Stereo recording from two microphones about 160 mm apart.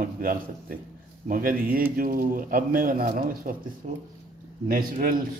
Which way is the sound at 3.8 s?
45° right (ahead or behind).